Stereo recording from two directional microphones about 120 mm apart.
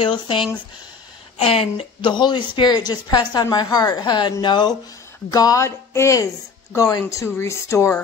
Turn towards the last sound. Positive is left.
turn(degrees=25)  # may be behind; listen again after turning